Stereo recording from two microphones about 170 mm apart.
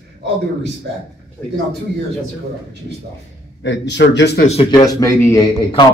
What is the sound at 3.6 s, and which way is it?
Speech, 90° left.